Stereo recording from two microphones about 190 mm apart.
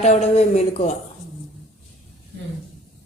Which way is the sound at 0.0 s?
35° left (ahead or behind).